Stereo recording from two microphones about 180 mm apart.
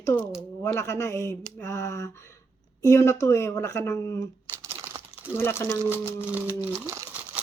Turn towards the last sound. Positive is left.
turn(degrees=-15)  # may be behind; listen again after turning